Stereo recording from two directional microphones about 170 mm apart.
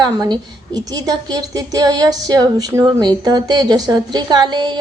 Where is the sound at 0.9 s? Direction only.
25° right (ahead or behind).